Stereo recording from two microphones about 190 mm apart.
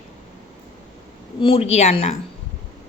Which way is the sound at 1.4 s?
30° left (ahead or behind).